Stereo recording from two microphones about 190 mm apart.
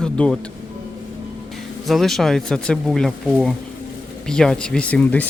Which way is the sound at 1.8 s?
Centre (ahead or behind).